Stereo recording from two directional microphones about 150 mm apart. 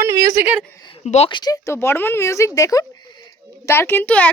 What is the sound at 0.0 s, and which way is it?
Speech, 20° right (ahead or behind).